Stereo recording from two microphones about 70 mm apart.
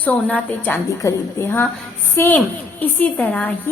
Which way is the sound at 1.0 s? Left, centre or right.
Left.